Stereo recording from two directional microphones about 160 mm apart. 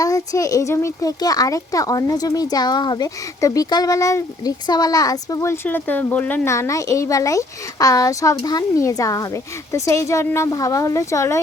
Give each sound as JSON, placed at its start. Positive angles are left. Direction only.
{"t": 0.0, "sound": "a child's voice", "side_deg": 20}